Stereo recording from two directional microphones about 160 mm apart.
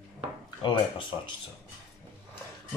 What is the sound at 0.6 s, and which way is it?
Speech, 30° left (ahead or behind).